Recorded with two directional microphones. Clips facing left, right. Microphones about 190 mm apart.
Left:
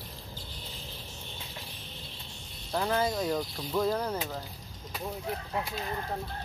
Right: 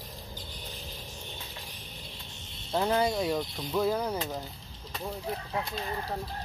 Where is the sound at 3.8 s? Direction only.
5° right (ahead or behind).